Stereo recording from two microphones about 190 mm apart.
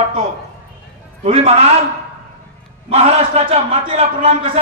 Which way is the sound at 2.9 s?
35° right (ahead or behind).